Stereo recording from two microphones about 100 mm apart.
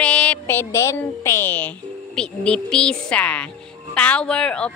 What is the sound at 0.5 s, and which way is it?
A woman's voice, 25° left (ahead or behind).